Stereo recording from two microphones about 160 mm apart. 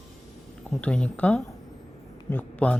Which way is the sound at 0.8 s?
5° left (ahead or behind).